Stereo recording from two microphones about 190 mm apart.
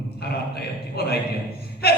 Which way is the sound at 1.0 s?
55° left (ahead or behind).